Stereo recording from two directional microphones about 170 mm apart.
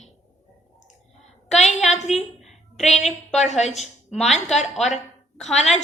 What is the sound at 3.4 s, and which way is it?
A woman's voice, 40° left (ahead or behind).